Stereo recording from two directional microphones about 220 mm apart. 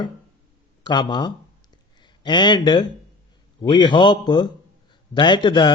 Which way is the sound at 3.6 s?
20° left (ahead or behind).